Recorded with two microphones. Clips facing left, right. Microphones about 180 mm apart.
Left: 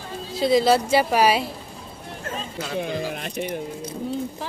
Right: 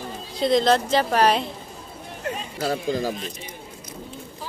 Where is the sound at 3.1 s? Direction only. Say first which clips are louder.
Left 3 dB; 65° left (ahead or behind).